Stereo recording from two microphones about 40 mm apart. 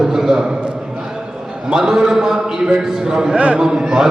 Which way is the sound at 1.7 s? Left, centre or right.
Centre.